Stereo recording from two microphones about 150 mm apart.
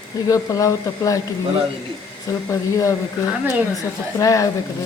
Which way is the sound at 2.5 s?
20° left (ahead or behind).